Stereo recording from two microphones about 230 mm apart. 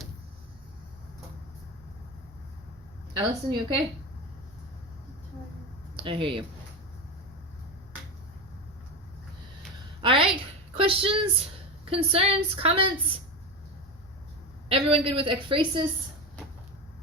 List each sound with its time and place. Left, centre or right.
3.2 s a woman's voice: centre
6.0 s speech: right
10.0 s a sound: right
10.8 s a woman's voice: right
14.7 s a woman's voice: right